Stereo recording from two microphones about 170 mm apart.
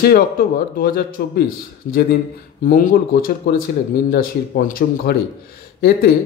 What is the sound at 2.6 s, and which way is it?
Speech, 50° left (ahead or behind).